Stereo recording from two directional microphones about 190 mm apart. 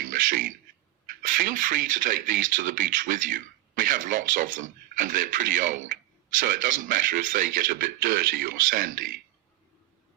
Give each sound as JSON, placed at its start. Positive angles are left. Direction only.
{"t": 0.3, "sound": "speech", "side_deg": -45}